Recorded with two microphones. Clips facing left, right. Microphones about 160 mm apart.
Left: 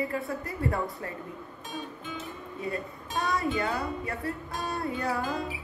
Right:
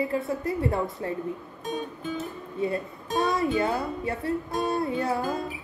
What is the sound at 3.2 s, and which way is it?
A woman's voice, 20° right (ahead or behind).